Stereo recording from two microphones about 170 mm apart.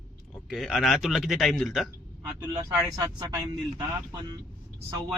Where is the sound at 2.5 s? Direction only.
20° right (ahead or behind).